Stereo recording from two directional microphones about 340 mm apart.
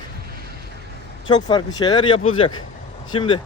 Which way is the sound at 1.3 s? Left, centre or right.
Centre.